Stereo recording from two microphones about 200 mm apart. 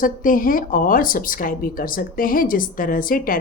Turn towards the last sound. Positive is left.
turn(degrees=45)  # may be behind; listen again after turning